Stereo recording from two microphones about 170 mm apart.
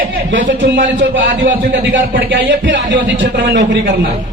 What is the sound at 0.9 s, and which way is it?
Speech, 90° right.